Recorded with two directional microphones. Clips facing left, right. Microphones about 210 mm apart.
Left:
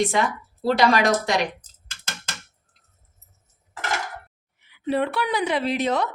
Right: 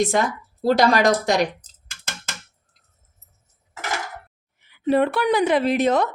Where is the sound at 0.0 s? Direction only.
45° right (ahead or behind).